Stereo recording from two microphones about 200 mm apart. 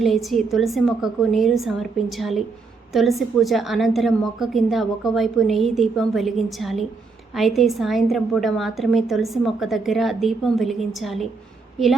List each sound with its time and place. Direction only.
0.0 s a woman's voice: centre (ahead or behind)